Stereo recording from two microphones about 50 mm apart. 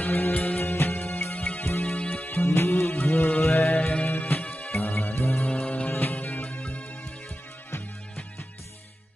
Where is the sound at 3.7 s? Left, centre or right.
Left.